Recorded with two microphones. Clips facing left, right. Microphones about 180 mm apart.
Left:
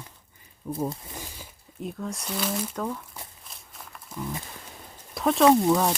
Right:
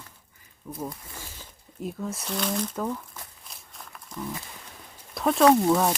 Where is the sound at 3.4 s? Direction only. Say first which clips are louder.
Even; centre (ahead or behind).